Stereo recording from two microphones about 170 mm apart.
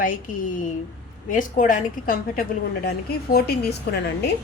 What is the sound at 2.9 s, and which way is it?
A woman's voice, 70° left (ahead or behind).